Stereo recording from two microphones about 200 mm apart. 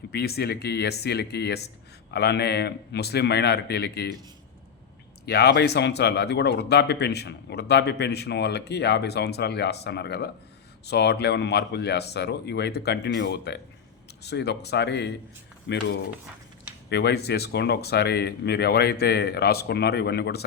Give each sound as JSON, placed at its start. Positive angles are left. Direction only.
{"t": 0.1, "sound": "speech", "side_deg": 50}
{"t": 5.2, "sound": "speech", "side_deg": 55}
{"t": 16.9, "sound": "speech", "side_deg": 55}